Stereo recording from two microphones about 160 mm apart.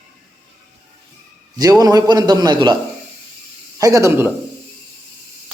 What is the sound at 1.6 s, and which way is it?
A man's voice, 20° right (ahead or behind).